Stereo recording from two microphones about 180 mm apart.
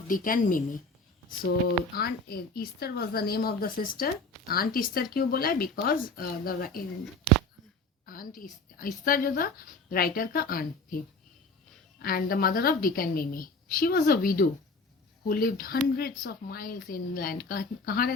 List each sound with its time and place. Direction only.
0.1 s a woman's voice: 50° left (ahead or behind)
7.0 s a sound: centre (ahead or behind)
8.0 s a woman's voice: 50° left (ahead or behind)
12.0 s a woman's voice: 55° left (ahead or behind)